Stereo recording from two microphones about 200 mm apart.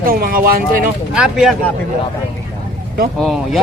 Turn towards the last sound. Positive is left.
turn(degrees=0)  # may be behind; listen again after turning